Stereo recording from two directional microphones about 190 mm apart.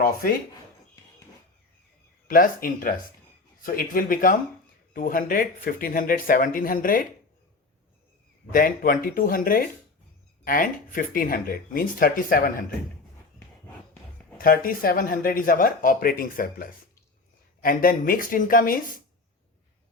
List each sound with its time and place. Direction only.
0.0 s speech: 50° left (ahead or behind)
2.2 s speech: 50° left (ahead or behind)
8.5 s speech: 50° left (ahead or behind)
14.3 s speech: 50° left (ahead or behind)